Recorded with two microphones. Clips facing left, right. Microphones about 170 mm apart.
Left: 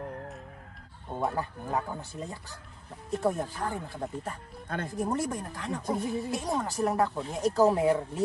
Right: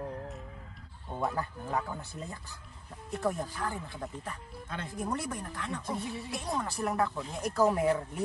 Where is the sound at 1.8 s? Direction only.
30° left (ahead or behind).